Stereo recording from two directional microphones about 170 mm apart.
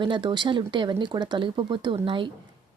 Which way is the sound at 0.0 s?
30° right (ahead or behind).